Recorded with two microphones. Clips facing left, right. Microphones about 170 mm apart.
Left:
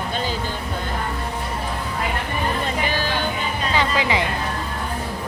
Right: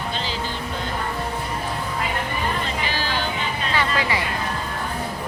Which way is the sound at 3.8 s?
15° left (ahead or behind).